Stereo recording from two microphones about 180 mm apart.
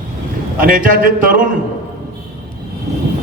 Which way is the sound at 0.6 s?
50° right (ahead or behind).